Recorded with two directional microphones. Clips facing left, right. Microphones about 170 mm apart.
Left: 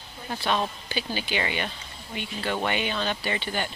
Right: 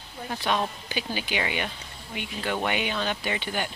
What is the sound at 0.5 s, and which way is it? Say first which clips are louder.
Speech: even; 10° right (ahead or behind).